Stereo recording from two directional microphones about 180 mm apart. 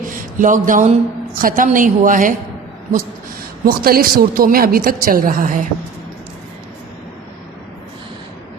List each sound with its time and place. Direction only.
0.0 s a sound: 45° right (ahead or behind)
1.4 s a woman's voice: 50° right (ahead or behind)
3.7 s a woman's voice: 55° right (ahead or behind)